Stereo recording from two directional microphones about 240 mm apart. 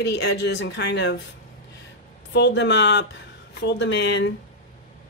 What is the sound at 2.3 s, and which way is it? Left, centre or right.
Speech, left.